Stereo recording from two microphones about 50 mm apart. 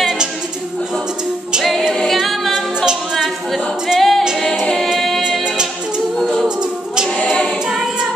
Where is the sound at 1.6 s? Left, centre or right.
Centre.